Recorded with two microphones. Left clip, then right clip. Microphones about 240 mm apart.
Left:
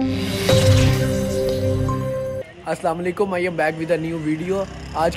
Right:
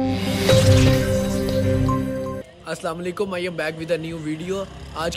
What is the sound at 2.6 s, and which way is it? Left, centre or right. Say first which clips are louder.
Speech: left 5 dB; centre.